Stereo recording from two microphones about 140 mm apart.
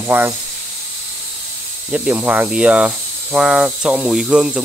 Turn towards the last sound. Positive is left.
turn(degrees=-5)  # may be behind; listen again after turning